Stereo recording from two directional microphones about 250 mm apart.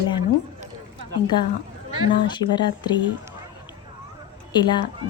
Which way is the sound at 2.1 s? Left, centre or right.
Centre.